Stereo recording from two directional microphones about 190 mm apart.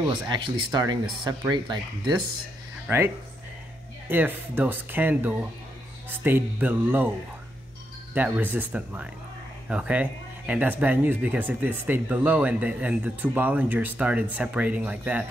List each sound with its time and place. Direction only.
0.3 s speech: 25° right (ahead or behind)
2.9 s speech: 10° right (ahead or behind)
4.1 s speech: 10° right (ahead or behind)
8.1 s speech: 10° right (ahead or behind)